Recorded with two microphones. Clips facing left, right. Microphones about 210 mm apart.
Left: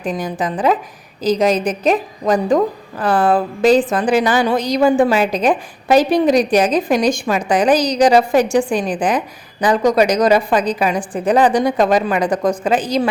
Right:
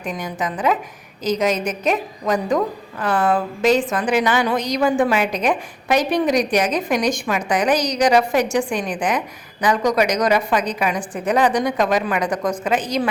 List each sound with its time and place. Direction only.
0.0 s a woman's voice: 30° left (ahead or behind)